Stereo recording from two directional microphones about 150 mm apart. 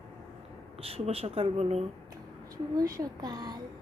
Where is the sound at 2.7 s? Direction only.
25° right (ahead or behind).